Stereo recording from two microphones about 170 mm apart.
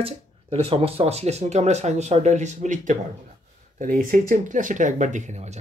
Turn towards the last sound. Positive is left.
turn(degrees=-45)  # may be behind; listen again after turning